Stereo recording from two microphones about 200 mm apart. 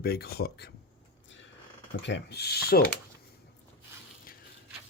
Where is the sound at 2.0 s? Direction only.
60° left (ahead or behind).